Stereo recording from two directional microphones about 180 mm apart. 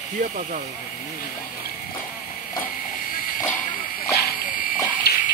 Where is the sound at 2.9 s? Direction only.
50° left (ahead or behind).